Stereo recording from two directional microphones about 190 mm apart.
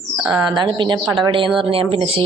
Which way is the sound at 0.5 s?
25° right (ahead or behind).